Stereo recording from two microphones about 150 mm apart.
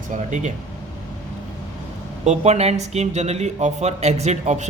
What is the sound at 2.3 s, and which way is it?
Speech, 45° right (ahead or behind).